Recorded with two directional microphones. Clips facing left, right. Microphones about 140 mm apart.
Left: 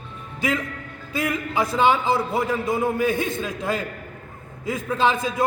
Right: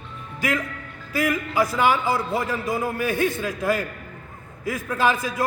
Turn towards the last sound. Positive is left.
turn(degrees=25)  # may be behind; listen again after turning